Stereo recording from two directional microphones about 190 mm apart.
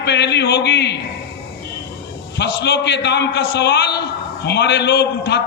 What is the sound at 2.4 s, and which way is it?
A man's voice, 65° left (ahead or behind).